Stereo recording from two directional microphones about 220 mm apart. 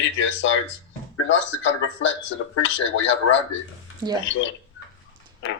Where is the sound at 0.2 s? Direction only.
60° left (ahead or behind).